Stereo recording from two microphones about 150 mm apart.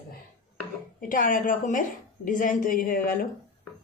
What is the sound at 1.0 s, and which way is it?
A woman's voice, 65° left (ahead or behind).